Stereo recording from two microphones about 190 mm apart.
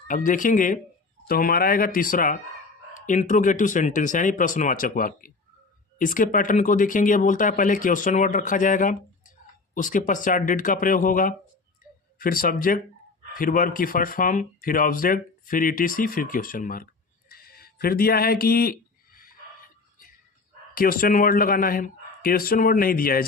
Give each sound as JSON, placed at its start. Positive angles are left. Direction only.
{"t": 0.1, "sound": "speech", "side_deg": 45}
{"t": 20.7, "sound": "speech", "side_deg": 50}